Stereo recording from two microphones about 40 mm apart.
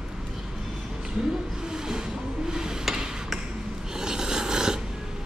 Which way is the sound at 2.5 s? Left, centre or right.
Centre.